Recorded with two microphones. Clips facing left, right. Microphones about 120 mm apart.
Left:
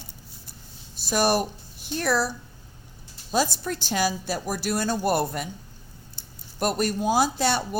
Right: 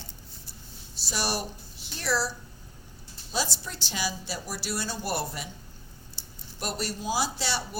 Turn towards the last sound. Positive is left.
turn(degrees=50)  # may be behind; listen again after turning